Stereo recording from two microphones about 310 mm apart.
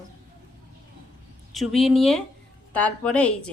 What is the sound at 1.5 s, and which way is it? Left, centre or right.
A woman's voice, centre.